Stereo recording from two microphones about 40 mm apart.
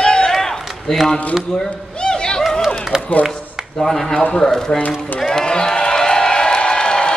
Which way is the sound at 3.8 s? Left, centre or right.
Centre.